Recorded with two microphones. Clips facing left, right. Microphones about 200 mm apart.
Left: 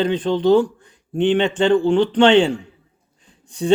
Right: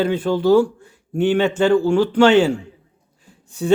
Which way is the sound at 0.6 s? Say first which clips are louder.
Right 2 dB; 10° right (ahead or behind).